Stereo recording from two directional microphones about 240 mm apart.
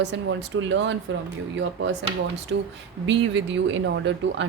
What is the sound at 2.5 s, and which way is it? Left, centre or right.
Speech, right.